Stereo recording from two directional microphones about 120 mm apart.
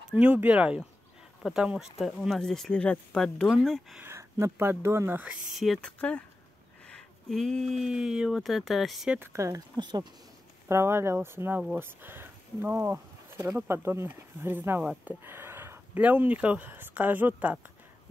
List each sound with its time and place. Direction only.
0.1 s speech: 15° right (ahead or behind); by 4.0 s 5° left (ahead or behind)
4.0 s speech: 25° right (ahead or behind)
5.5 s speech: centre (ahead or behind)
5.8 s speech: 10° left (ahead or behind)
9.2 s speech: 25° right (ahead or behind)
9.8 s speech: 40° right (ahead or behind)
10.7 s speech: 20° right (ahead or behind)